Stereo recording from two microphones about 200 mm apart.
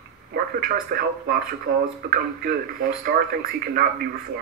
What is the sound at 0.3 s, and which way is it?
Speech, 50° right (ahead or behind).